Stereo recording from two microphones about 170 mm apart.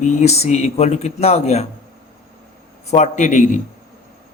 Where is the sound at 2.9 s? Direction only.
45° left (ahead or behind).